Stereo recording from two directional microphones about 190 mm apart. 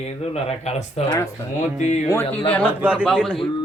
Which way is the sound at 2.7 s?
5° right (ahead or behind).